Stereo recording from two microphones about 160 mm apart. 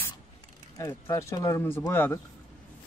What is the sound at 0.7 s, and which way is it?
Speech, 20° left (ahead or behind).